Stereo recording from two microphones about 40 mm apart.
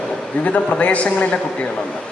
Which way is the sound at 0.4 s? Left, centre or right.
Left.